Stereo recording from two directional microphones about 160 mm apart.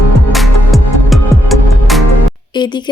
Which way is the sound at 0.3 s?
Centre (ahead or behind).